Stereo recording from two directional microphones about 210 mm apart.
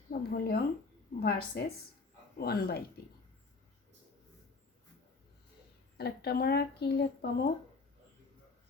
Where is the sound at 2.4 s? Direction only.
50° left (ahead or behind).